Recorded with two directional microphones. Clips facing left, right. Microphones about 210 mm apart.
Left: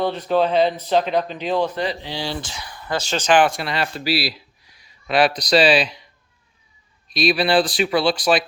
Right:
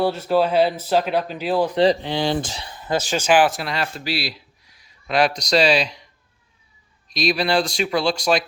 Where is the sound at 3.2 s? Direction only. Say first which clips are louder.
Left 1 dB; 5° right (ahead or behind).